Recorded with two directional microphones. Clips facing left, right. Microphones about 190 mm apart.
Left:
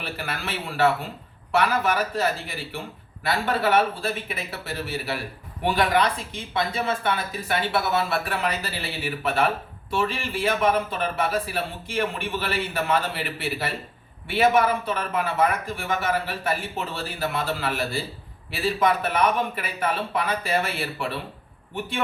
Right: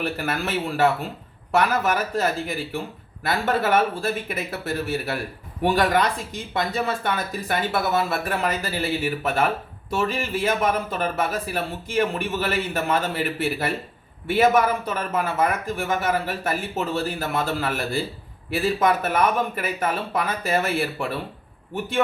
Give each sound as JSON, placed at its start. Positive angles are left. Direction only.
{"t": 0.0, "sound": "a man's voice", "side_deg": -45}
{"t": 1.5, "sound": "a man's voice", "side_deg": -45}